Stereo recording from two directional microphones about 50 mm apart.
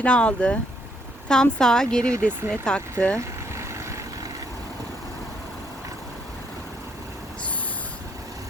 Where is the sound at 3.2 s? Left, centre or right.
Right.